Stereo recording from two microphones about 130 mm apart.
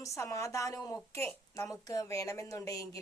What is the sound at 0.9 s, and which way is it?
A woman's voice, 15° left (ahead or behind).